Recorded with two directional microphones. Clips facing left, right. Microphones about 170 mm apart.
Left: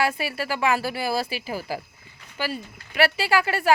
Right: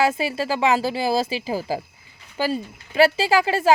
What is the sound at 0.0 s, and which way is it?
Speech, 20° right (ahead or behind).